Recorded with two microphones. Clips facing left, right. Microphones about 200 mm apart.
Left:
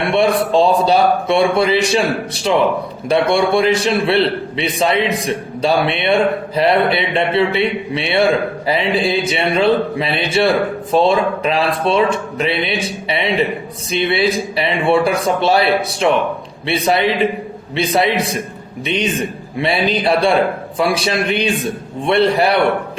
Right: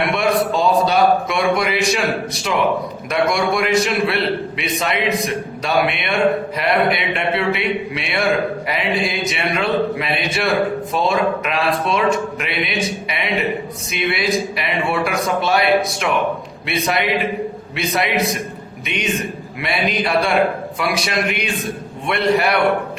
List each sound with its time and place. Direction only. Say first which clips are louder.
0.1 s a man's voice: left 4 dB; 30° left (ahead or behind)